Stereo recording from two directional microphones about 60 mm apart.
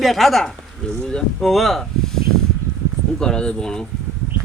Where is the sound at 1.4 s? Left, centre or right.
Centre.